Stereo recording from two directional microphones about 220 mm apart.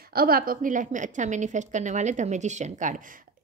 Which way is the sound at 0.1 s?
45° right (ahead or behind).